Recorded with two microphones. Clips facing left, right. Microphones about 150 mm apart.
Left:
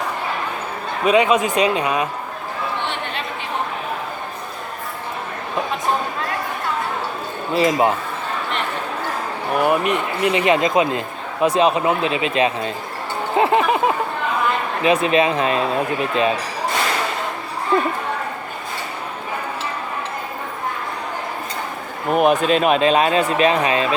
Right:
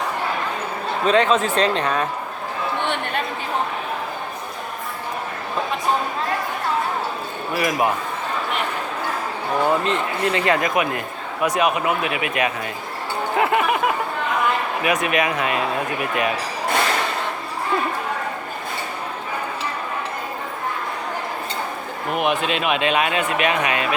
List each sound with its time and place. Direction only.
1.0 s speech: 10° left (ahead or behind)
2.9 s chatter: 50° right (ahead or behind)
7.5 s speech: 25° left (ahead or behind)
9.6 s speech: 15° left (ahead or behind)
13.3 s a sound: 25° left (ahead or behind)
14.8 s speech: 25° left (ahead or behind)
22.1 s speech: 40° left (ahead or behind)